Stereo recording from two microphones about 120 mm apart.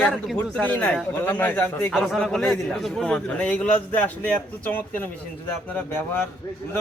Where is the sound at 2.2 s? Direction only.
5° left (ahead or behind).